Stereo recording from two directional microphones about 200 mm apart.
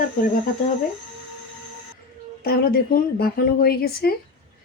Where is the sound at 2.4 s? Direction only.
50° left (ahead or behind).